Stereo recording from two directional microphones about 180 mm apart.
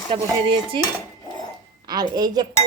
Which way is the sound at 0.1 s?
30° right (ahead or behind).